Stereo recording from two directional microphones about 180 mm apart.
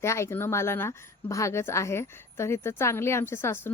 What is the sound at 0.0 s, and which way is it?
Speech, 15° left (ahead or behind).